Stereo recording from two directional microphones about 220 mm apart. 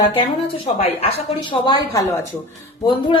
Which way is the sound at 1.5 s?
20° left (ahead or behind).